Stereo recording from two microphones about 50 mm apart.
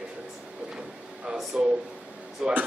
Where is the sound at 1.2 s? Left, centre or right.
Centre.